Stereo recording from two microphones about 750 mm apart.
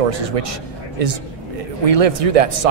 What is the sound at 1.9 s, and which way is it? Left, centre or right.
Speech, right.